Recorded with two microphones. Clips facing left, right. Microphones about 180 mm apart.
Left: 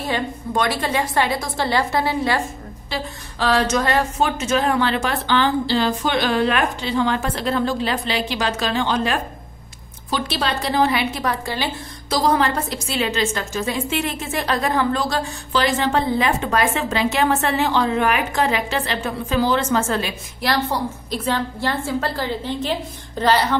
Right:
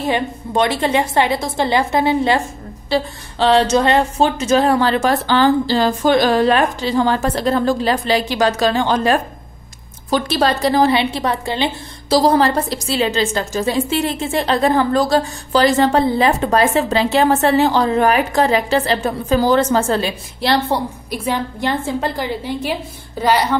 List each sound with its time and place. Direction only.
0.0 s a woman's voice: 25° right (ahead or behind)
11.0 s a woman's voice: 25° right (ahead or behind)
21.1 s a woman's voice: 10° right (ahead or behind)